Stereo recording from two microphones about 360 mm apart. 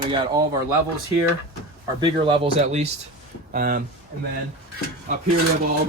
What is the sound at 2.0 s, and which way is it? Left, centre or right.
Speech, centre.